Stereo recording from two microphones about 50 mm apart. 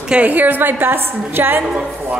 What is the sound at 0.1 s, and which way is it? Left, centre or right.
A woman's voice, right.